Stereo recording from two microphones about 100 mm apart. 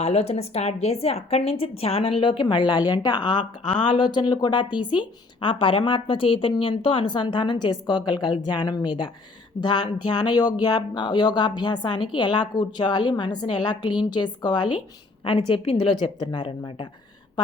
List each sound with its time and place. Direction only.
0.0 s a woman's voice: 90° left; by 14.8 s 45° left (ahead or behind)
15.2 s a woman's voice: 60° left (ahead or behind)
15.9 s a woman's voice: 50° left (ahead or behind)